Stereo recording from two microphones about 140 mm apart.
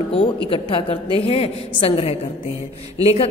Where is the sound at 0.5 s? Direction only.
40° left (ahead or behind).